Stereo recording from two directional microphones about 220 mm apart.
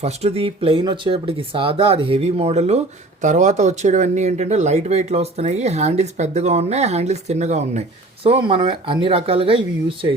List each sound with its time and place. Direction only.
0.0 s speech: 30° right (ahead or behind)